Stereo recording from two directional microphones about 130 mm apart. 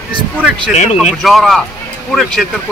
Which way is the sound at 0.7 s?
65° left (ahead or behind).